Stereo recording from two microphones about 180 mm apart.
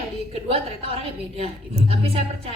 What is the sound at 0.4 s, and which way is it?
A woman's voice, 30° right (ahead or behind).